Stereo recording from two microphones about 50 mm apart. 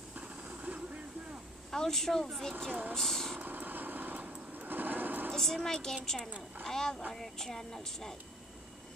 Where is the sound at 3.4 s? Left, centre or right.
Right.